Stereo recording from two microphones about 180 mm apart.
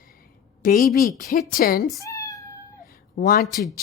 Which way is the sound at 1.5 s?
55° left (ahead or behind).